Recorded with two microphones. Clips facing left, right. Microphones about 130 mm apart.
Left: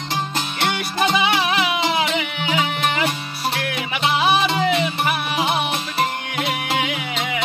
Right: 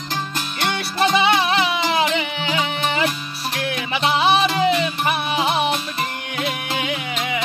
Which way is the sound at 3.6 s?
25° right (ahead or behind).